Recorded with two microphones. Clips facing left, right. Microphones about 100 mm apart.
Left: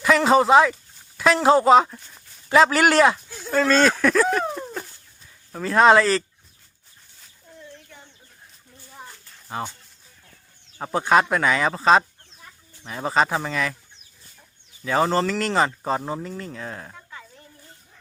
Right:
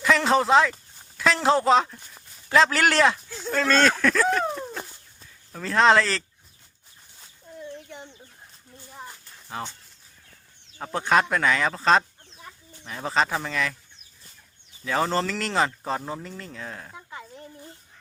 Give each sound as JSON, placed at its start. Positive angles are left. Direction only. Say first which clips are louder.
{"t": 0.0, "sound": "speech", "louder": "left 4 dB", "side_deg": 5}
{"t": 7.6, "sound": "chicken", "louder": "right 7 dB", "side_deg": -20}
{"t": 9.5, "sound": "speech", "louder": "left 4 dB", "side_deg": 5}
{"t": 10.9, "sound": "speech", "louder": "left 3 dB", "side_deg": 5}
{"t": 14.8, "sound": "speech", "louder": "left 4 dB", "side_deg": 5}
{"t": 16.0, "sound": "speech", "louder": "left 4 dB", "side_deg": 15}
{"t": 16.2, "sound": "speech", "louder": "left 4 dB", "side_deg": 5}